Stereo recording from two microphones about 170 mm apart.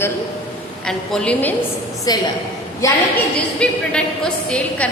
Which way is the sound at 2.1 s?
20° left (ahead or behind).